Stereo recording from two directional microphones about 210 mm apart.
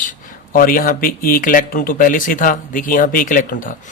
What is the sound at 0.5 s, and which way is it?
A man's voice, 40° left (ahead or behind).